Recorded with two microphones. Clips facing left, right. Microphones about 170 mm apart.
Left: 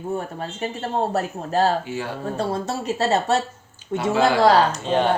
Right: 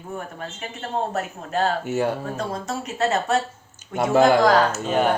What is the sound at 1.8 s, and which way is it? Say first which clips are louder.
Speech: right 5 dB; 45° right (ahead or behind).